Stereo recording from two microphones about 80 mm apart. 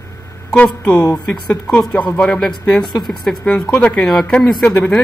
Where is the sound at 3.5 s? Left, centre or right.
Centre.